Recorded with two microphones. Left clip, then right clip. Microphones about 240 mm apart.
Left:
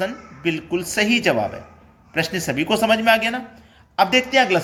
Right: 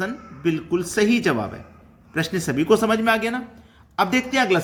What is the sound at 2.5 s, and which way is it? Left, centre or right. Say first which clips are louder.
Speech: even; centre.